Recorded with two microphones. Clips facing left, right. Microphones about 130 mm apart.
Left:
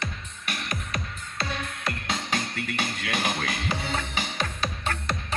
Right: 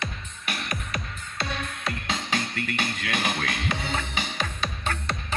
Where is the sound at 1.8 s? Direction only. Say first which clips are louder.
Even; 5° left (ahead or behind).